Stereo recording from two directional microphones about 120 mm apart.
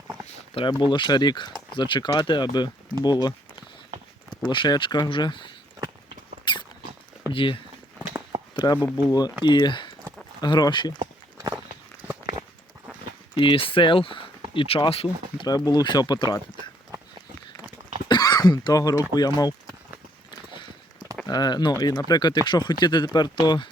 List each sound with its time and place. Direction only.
0.5 s speech: 40° left (ahead or behind)
4.4 s speech: 40° left (ahead or behind)
6.4 s rodents: 40° left (ahead or behind)
7.3 s speech: 45° left (ahead or behind)
8.5 s speech: 35° left (ahead or behind)
13.3 s speech: 45° left (ahead or behind)
15.4 s speech: 35° left (ahead or behind)
18.1 s speech: 30° left (ahead or behind)
21.2 s speech: 35° left (ahead or behind)